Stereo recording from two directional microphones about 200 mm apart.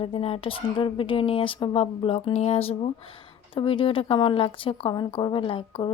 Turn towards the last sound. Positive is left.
turn(degrees=25)  # may be behind; listen again after turning